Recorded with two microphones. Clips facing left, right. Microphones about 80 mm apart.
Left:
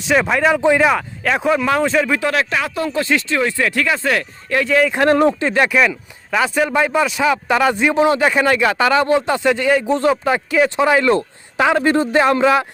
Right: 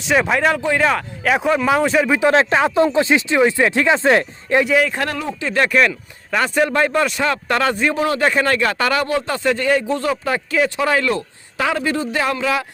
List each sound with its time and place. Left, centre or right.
0.0 s a man's voice: centre
2.1 s speech: right
4.6 s speech: centre
4.9 s a man's voice: left
5.5 s a man's voice: centre
7.9 s speech: left
8.2 s speech: centre
9.4 s a man's voice: centre; by 12.6 s left